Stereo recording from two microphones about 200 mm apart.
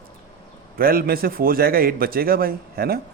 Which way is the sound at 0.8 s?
50° right (ahead or behind).